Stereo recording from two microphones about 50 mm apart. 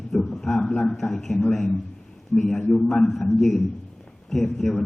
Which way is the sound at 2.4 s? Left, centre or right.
Centre.